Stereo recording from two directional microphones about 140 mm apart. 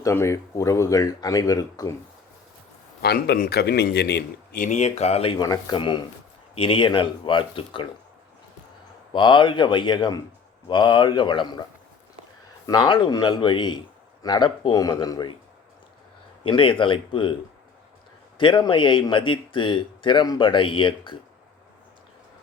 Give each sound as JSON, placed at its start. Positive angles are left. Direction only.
{"t": 0.0, "sound": "speech", "side_deg": 20}
{"t": 3.3, "sound": "a man's voice", "side_deg": 90}
{"t": 4.5, "sound": "speech", "side_deg": 75}
{"t": 4.8, "sound": "speech", "side_deg": 50}
{"t": 9.1, "sound": "speech", "side_deg": 35}
{"t": 12.6, "sound": "speech", "side_deg": 30}
{"t": 16.4, "sound": "speech", "side_deg": 40}
{"t": 18.3, "sound": "speech", "side_deg": 35}